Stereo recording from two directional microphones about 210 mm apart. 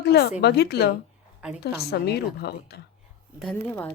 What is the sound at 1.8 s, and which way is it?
Speech, 50° left (ahead or behind).